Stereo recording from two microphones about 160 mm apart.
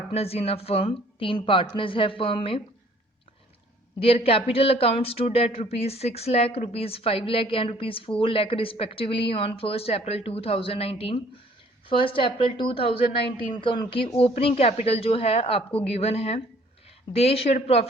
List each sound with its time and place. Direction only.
0.1 s speech: 40° left (ahead or behind)
4.0 s speech: 35° left (ahead or behind)